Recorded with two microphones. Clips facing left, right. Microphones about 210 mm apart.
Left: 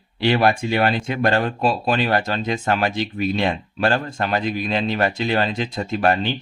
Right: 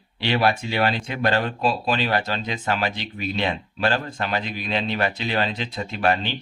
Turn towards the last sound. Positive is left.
turn(degrees=45)  # may be behind; listen again after turning